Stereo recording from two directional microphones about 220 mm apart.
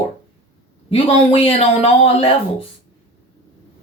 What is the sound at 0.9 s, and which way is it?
Speech, 25° left (ahead or behind).